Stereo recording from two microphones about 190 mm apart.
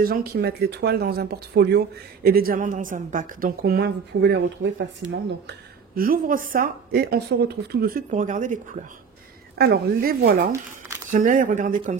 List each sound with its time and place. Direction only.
0.0 s speech: 50° right (ahead or behind); by 5.6 s 75° right (ahead or behind)
5.9 s a woman's voice: 50° right (ahead or behind)
9.6 s a woman's voice: 55° right (ahead or behind)